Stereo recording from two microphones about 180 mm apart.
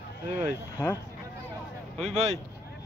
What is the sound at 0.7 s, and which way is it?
Speech, 20° left (ahead or behind).